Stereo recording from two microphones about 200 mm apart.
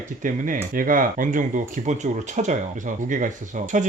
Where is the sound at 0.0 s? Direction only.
40° right (ahead or behind).